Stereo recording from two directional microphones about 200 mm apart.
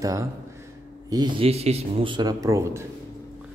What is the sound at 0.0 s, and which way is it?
Speech, 15° right (ahead or behind).